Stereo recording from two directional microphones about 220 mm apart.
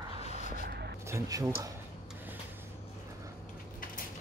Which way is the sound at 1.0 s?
15° right (ahead or behind).